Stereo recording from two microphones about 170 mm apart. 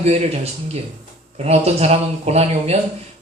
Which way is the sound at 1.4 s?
40° right (ahead or behind).